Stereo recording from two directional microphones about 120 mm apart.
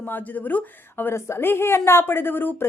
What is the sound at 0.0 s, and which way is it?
A woman's voice, 15° left (ahead or behind).